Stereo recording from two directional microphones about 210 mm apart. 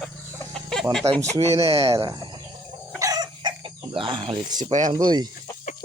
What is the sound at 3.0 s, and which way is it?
Chicken, 15° right (ahead or behind).